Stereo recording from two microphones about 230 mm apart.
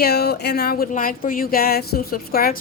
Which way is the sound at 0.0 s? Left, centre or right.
Left.